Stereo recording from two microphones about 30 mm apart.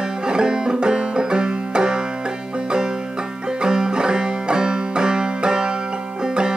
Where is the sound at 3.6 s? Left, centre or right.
Right.